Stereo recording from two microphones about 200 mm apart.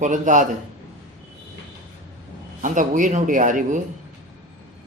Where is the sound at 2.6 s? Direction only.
40° right (ahead or behind).